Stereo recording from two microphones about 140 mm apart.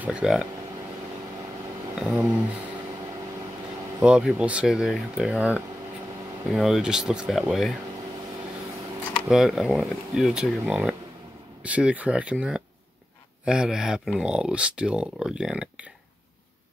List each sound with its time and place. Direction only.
0.0 s speech: 5° right (ahead or behind)
2.0 s speech: 5° right (ahead or behind)
4.0 s speech: 5° right (ahead or behind)
9.3 s speech: centre (ahead or behind)